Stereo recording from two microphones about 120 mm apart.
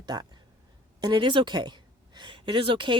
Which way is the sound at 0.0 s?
35° right (ahead or behind).